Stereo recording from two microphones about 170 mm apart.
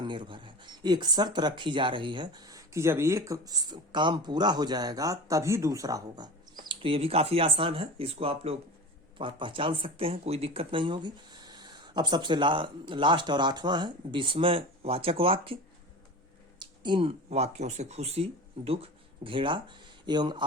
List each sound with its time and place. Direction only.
0.0 s speech: 25° right (ahead or behind)
6.7 s speech: 35° right (ahead or behind)
16.6 s speech: 30° right (ahead or behind)